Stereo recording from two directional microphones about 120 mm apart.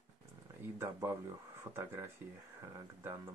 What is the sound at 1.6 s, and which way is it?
Speech, 20° right (ahead or behind).